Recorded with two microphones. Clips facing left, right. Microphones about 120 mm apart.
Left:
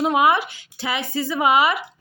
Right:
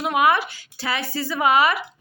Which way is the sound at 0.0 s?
25° left (ahead or behind).